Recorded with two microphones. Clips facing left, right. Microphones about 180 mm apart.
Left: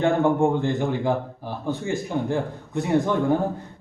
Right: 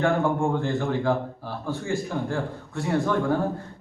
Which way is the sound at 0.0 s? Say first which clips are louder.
Left 3 dB; 20° left (ahead or behind).